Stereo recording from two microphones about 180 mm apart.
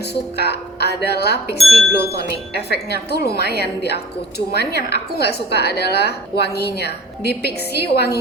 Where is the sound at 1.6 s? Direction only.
Centre (ahead or behind).